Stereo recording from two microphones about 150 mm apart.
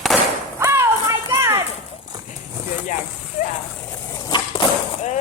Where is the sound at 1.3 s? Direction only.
25° right (ahead or behind).